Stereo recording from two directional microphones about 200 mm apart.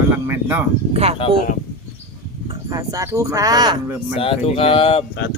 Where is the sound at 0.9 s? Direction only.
30° right (ahead or behind).